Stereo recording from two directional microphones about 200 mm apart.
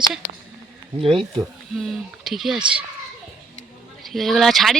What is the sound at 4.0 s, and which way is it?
Speech, centre (ahead or behind).